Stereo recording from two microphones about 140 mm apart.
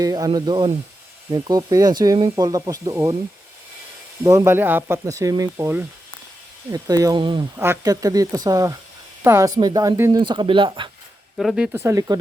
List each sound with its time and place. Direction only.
0.0 s speech: 25° right (ahead or behind)
4.2 s speech: 20° right (ahead or behind)
7.5 s speech: 20° right (ahead or behind); by 10.8 s 35° right (ahead or behind)
11.3 s speech: 5° right (ahead or behind); by 12.2 s 25° right (ahead or behind)